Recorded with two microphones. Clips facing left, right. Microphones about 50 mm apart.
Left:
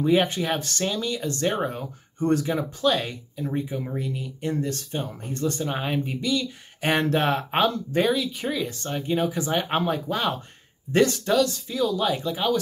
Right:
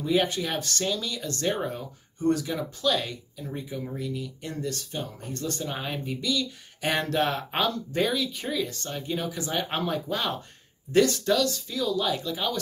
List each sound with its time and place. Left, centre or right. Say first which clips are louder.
0.0 s speech: left 4 dB; left
1.6 s speech: left 4 dB; left
8.1 s speech: left 4 dB; centre